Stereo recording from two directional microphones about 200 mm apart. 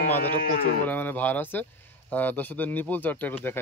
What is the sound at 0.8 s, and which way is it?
Speech, 10° left (ahead or behind).